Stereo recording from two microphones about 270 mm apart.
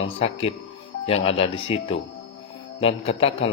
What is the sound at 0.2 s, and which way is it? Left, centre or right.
A man's voice, left.